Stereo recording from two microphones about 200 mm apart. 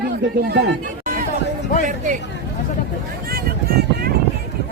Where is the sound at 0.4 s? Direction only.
55° right (ahead or behind).